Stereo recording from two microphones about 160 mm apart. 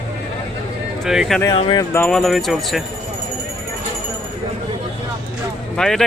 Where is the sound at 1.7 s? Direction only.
15° left (ahead or behind).